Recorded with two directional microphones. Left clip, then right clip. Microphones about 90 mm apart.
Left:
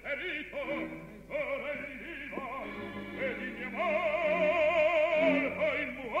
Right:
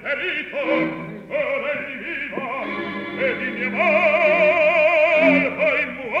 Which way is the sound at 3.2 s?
25° right (ahead or behind).